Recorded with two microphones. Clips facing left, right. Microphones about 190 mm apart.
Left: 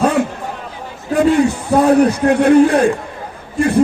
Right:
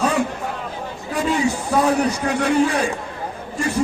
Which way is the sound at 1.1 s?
55° left (ahead or behind).